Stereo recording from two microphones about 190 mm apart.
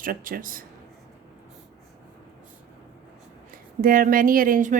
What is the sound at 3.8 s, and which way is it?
Speech, 50° right (ahead or behind).